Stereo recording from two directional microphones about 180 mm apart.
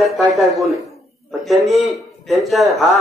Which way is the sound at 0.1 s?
Centre (ahead or behind).